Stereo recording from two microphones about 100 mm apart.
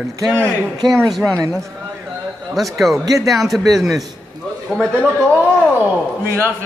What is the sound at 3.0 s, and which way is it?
Speech, 35° right (ahead or behind).